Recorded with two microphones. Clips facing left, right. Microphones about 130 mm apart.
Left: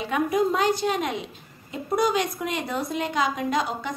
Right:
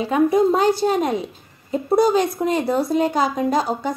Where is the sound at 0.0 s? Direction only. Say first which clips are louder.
Right 7 dB; 35° right (ahead or behind).